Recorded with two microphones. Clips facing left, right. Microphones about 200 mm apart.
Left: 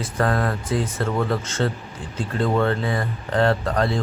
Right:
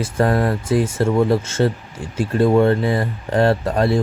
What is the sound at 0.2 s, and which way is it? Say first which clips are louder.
A man's voice: right 4 dB; 25° right (ahead or behind).